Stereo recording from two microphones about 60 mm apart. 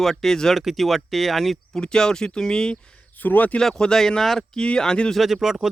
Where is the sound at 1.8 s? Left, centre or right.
Centre.